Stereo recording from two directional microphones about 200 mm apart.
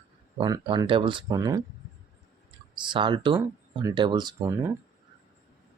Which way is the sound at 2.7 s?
25° right (ahead or behind).